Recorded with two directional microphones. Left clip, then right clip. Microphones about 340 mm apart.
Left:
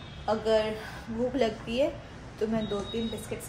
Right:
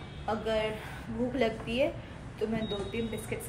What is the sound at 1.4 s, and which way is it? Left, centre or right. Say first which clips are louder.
Speech: left 1 dB; centre.